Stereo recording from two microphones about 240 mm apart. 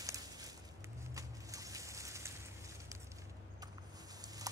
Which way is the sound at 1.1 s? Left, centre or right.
Centre.